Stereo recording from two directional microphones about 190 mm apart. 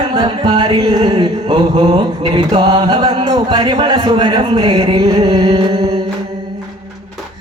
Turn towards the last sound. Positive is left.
turn(degrees=-25)  # may be behind; listen again after turning